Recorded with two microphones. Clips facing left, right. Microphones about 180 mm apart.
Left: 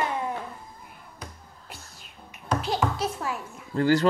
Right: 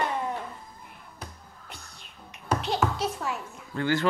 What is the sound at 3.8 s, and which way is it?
Speech, 35° left (ahead or behind).